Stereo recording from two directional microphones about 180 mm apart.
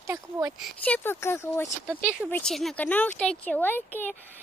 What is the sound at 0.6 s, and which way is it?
Speech, 10° left (ahead or behind).